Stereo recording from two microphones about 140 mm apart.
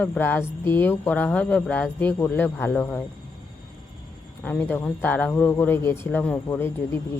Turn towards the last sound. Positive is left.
turn(degrees=15)  # may be behind; listen again after turning